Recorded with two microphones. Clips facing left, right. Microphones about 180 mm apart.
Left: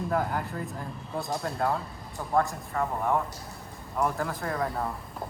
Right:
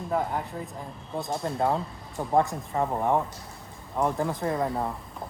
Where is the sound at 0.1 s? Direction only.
Centre (ahead or behind).